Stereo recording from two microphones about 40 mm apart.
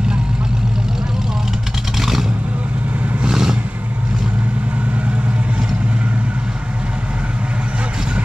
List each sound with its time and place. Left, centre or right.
2.0 s vehicle: centre
3.3 s vehicle: centre